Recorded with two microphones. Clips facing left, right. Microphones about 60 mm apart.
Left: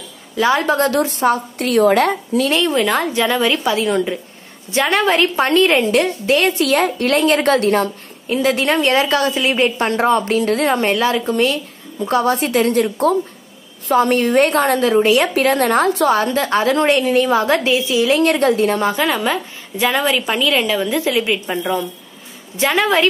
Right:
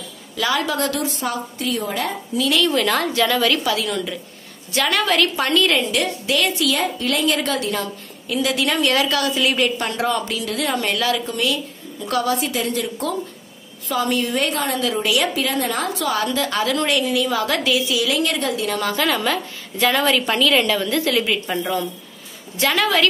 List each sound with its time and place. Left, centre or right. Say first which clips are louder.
0.4 s a woman's voice: left 6 dB; left
1.6 s a woman's voice: left 11 dB; left
2.5 s a woman's voice: even; left
15.3 s a woman's voice: left 8 dB; left